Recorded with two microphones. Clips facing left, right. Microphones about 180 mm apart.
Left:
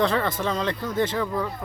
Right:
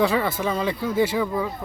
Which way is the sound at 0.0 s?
10° right (ahead or behind).